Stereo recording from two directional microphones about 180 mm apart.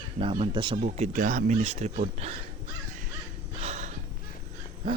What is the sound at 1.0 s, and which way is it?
Speech, 45° right (ahead or behind).